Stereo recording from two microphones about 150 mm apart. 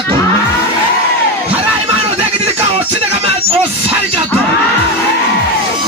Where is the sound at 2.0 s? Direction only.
45° right (ahead or behind).